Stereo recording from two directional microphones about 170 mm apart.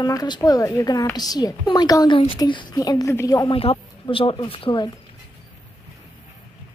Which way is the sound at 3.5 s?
35° left (ahead or behind).